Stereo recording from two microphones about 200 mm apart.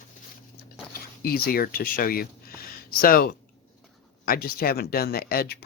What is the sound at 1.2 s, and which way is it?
Speech, 50° left (ahead or behind).